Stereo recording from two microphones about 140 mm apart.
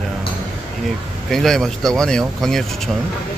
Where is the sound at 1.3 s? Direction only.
5° left (ahead or behind).